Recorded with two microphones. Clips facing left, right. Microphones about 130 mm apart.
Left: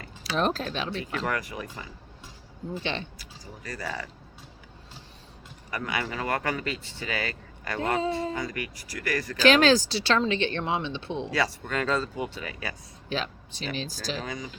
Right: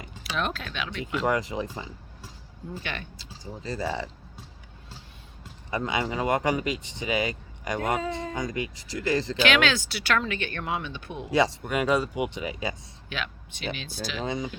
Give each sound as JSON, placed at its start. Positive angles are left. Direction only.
{"t": 0.3, "sound": "speech", "side_deg": 35}
{"t": 1.3, "sound": "speech", "side_deg": -25}
{"t": 2.8, "sound": "speech", "side_deg": 25}
{"t": 3.2, "sound": "speech", "side_deg": -25}
{"t": 5.7, "sound": "speech", "side_deg": -20}
{"t": 9.4, "sound": "speech", "side_deg": 35}
{"t": 11.3, "sound": "speech", "side_deg": -20}
{"t": 13.1, "sound": "speech", "side_deg": 35}
{"t": 14.3, "sound": "speech", "side_deg": -25}